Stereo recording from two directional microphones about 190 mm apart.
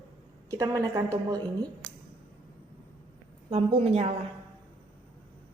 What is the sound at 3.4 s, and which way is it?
Speech, 30° right (ahead or behind).